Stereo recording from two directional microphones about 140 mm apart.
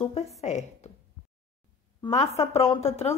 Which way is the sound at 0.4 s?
55° left (ahead or behind).